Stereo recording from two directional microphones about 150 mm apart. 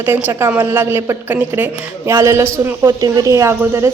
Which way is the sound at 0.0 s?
15° right (ahead or behind).